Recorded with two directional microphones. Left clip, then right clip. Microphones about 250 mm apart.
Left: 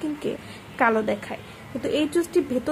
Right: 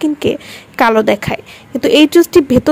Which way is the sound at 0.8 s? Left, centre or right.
Right.